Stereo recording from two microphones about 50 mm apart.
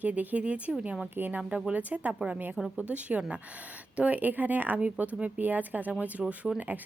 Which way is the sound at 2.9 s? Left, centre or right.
Right.